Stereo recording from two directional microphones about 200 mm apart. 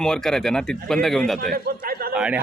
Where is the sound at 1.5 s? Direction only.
45° right (ahead or behind).